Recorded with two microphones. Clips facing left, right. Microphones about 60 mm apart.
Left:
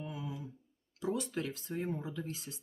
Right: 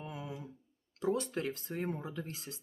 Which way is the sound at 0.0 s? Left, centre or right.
Right.